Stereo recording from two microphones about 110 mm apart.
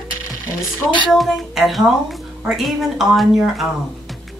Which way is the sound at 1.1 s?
Centre (ahead or behind).